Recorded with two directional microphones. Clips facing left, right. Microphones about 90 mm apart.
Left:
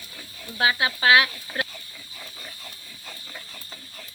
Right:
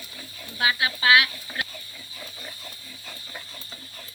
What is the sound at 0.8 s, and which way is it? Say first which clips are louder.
Speech: left 1 dB; 30° left (ahead or behind).